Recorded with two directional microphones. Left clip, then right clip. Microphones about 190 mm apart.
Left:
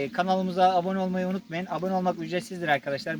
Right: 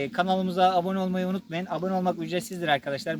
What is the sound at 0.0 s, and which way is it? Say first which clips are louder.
Speech: even; centre (ahead or behind).